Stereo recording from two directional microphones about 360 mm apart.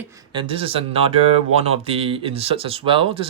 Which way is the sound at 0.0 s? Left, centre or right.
Centre.